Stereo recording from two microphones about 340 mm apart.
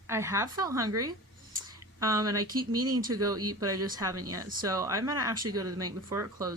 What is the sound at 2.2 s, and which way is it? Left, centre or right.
Speech, right.